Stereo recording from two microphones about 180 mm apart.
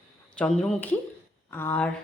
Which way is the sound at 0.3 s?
5° left (ahead or behind).